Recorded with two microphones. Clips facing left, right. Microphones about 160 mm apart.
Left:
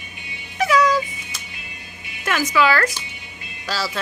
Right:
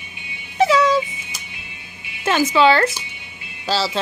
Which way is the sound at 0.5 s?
25° right (ahead or behind).